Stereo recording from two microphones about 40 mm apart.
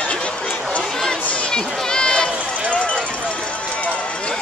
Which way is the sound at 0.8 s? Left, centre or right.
Centre.